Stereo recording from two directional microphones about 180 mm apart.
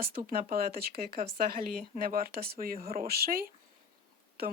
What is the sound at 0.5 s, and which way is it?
Speech, 55° right (ahead or behind).